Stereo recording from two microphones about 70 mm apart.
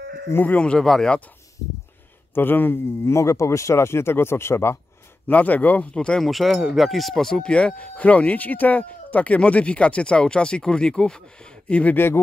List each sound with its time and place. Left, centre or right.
0.3 s speech: left
0.6 s speech: centre
2.3 s speech: left
5.3 s speech: left
5.9 s speech: centre
6.2 s speech: centre; by 12.2 s left